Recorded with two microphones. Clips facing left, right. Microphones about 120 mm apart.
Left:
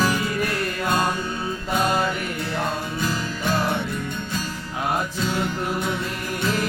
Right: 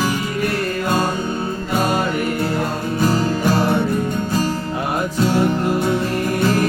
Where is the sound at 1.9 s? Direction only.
50° right (ahead or behind).